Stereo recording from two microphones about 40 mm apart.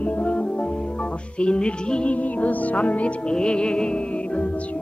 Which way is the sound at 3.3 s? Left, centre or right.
Left.